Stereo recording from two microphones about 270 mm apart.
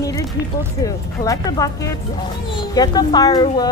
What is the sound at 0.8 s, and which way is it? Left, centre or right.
Speech, centre.